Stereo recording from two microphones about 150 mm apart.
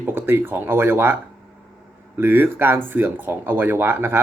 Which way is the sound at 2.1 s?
15° right (ahead or behind).